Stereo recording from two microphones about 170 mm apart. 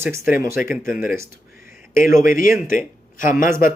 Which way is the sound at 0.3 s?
60° left (ahead or behind).